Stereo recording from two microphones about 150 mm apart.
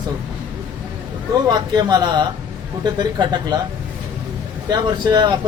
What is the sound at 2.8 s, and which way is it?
Speech, 30° right (ahead or behind).